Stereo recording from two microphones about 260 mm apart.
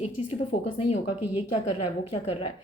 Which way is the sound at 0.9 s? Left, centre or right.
Left.